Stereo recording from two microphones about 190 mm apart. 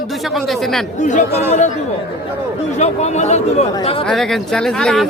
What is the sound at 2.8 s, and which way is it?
Speech, 35° left (ahead or behind).